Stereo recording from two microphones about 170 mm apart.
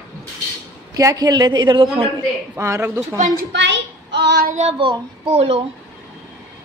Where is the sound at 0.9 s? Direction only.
20° right (ahead or behind).